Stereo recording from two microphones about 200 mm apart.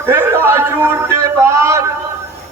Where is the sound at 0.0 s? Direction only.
10° right (ahead or behind).